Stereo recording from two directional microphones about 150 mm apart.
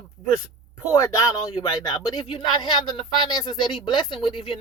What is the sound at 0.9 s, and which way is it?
Speech, 20° left (ahead or behind).